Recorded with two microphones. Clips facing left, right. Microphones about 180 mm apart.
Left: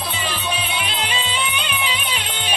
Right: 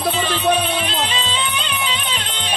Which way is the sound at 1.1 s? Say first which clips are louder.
Right 1 dB; 10° left (ahead or behind).